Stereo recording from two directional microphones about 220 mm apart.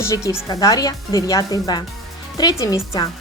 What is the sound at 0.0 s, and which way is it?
Speech, 15° left (ahead or behind).